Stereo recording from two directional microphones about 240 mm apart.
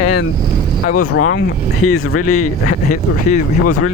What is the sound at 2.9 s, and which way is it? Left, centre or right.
Speech, left.